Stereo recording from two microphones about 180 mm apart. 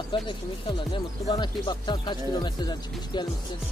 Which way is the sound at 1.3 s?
25° left (ahead or behind).